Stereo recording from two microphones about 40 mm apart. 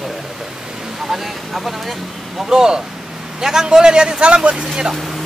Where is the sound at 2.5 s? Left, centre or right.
Centre.